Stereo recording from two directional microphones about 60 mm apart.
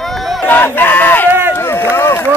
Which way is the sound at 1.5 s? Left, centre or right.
Left.